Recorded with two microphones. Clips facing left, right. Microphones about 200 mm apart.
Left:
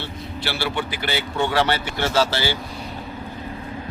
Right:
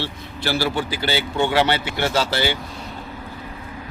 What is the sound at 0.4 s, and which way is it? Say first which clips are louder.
Speech: right 4 dB; 40° right (ahead or behind).